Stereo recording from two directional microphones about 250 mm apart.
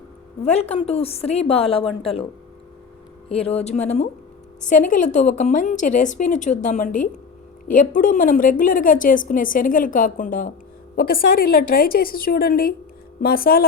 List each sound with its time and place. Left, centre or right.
0.4 s a woman's voice: left
3.2 s a woman's voice: left
11.5 s a woman's voice: left